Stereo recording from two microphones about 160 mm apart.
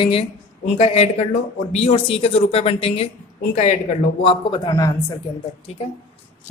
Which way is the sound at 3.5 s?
50° left (ahead or behind).